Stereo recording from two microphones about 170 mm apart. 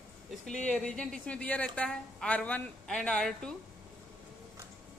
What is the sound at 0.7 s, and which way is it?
A woman's voice, 5° left (ahead or behind).